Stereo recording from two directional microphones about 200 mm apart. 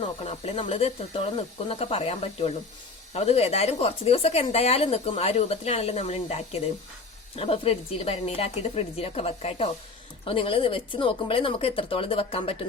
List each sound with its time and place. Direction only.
0.3 s a woman's voice: 30° left (ahead or behind)